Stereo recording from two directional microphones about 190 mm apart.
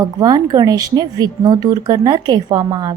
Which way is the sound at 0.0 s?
20° right (ahead or behind).